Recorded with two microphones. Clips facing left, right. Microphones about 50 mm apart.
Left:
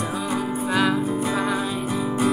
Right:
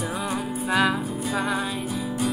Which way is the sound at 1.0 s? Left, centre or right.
Left.